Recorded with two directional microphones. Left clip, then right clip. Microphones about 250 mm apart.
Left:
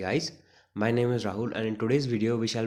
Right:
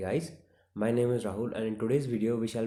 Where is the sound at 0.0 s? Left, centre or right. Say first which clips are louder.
Left 3 dB; left.